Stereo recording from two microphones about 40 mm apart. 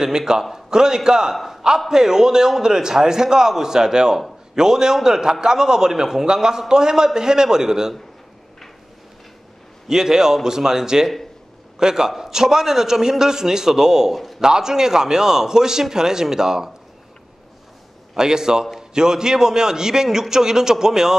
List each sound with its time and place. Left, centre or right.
0.0 s a man's voice: centre
1.3 s a man's voice: centre
1.9 s a man's voice: centre
9.8 s a man's voice: centre
18.1 s a man's voice: centre